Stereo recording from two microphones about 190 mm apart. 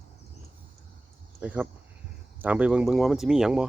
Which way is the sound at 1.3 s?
10° right (ahead or behind).